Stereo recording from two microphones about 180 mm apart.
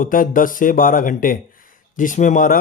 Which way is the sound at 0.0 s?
50° left (ahead or behind).